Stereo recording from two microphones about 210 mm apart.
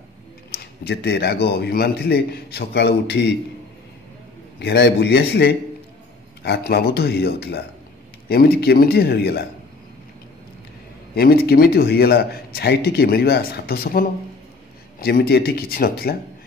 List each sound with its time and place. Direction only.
0.6 s a man's voice: 50° left (ahead or behind)
4.6 s a man's voice: 55° left (ahead or behind)
11.1 s a man's voice: 45° left (ahead or behind)